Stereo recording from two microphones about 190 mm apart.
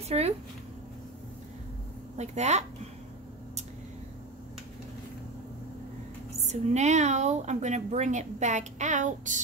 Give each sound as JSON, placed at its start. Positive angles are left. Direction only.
{"t": 0.1, "sound": "speech", "side_deg": -35}
{"t": 2.1, "sound": "speech", "side_deg": -35}
{"t": 6.4, "sound": "speech", "side_deg": -35}